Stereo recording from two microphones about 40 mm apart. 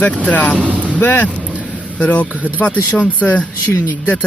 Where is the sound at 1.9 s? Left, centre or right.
Left.